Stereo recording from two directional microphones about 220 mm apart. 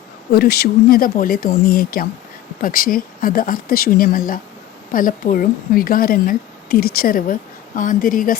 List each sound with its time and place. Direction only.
0.3 s speech: 45° left (ahead or behind)